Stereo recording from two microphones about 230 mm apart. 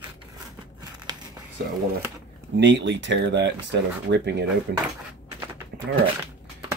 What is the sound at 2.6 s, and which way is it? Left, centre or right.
Speech, right.